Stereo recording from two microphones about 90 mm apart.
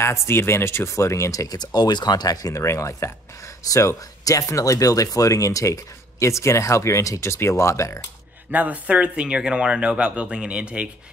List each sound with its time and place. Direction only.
0.0 s speech: 30° left (ahead or behind)
8.5 s speech: 15° right (ahead or behind)